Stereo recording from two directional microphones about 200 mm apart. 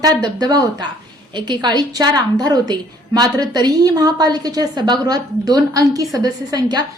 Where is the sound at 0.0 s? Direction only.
20° right (ahead or behind).